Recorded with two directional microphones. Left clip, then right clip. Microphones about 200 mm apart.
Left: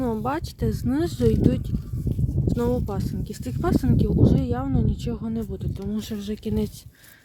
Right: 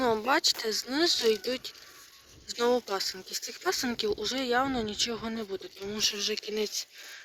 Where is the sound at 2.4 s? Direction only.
10° left (ahead or behind).